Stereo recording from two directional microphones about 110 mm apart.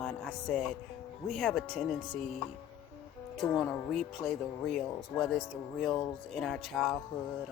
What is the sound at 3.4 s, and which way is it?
Speech, 5° left (ahead or behind).